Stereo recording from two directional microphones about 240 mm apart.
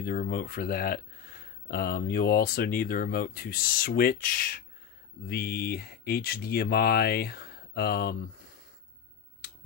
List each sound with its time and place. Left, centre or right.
0.0 s speech: left